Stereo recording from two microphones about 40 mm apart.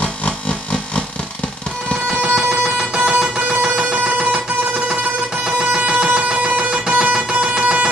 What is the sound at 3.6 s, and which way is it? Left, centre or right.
Plucked string instrument, right.